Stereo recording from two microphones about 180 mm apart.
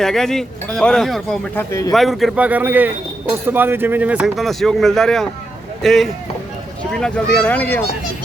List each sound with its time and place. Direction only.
0.0 s a man's voice: centre (ahead or behind)
1.5 s speech: 15° left (ahead or behind)
1.9 s a man's voice: centre (ahead or behind)
7.3 s speech: 10° left (ahead or behind)